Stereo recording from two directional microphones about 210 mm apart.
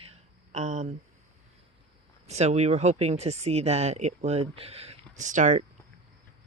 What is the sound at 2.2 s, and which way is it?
Speech, 30° right (ahead or behind).